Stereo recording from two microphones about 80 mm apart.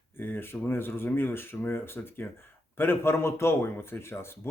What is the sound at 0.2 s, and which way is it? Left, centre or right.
Speech, left.